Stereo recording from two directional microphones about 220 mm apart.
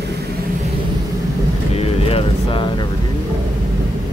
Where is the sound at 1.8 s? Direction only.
25° left (ahead or behind).